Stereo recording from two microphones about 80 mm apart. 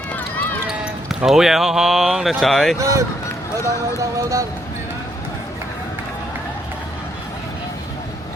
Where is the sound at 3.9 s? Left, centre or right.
Right.